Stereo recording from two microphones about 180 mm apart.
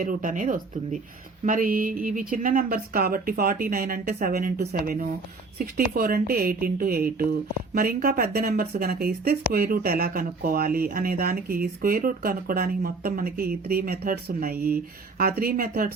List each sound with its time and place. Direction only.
0.0 s speech: 50° right (ahead or behind)